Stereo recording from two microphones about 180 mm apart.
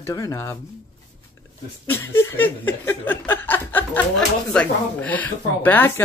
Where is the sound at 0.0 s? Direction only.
20° left (ahead or behind).